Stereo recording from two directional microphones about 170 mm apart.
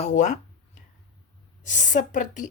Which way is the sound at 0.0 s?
45° left (ahead or behind).